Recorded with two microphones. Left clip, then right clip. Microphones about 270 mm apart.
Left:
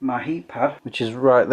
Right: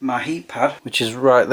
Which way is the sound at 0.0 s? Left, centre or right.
Centre.